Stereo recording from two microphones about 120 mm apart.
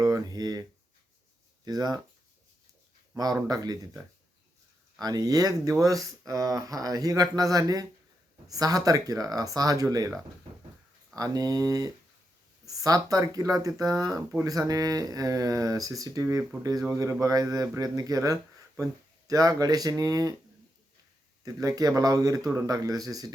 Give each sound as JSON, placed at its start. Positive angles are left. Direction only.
{"t": 0.0, "sound": "speech", "side_deg": -30}
{"t": 1.6, "sound": "speech", "side_deg": -30}
{"t": 3.4, "sound": "speech", "side_deg": -35}
{"t": 4.9, "sound": "speech", "side_deg": -30}
{"t": 21.4, "sound": "speech", "side_deg": -30}